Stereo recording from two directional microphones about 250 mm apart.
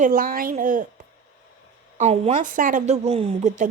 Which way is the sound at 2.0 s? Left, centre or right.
Right.